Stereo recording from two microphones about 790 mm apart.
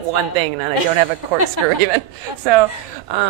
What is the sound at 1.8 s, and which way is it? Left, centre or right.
A woman's voice, right.